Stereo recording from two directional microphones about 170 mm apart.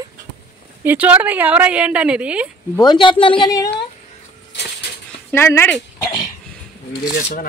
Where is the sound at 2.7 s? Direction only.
25° left (ahead or behind).